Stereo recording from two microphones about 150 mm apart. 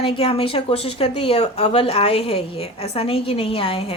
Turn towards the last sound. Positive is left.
turn(degrees=40)  # may be behind; listen again after turning